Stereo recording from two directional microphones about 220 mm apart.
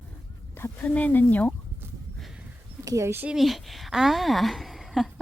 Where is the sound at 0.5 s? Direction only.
10° left (ahead or behind).